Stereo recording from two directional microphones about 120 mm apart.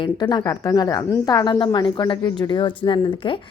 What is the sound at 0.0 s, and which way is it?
A woman's voice, 35° left (ahead or behind).